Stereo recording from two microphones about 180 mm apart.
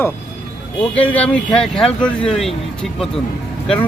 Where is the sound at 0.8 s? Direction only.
10° left (ahead or behind).